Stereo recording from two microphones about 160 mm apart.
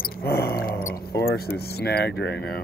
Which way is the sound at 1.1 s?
85° left.